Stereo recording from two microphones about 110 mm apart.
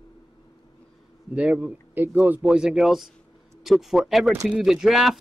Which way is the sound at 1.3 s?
10° right (ahead or behind).